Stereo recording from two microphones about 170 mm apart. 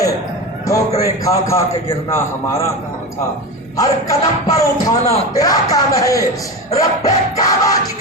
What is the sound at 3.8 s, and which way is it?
A man's voice, 20° left (ahead or behind).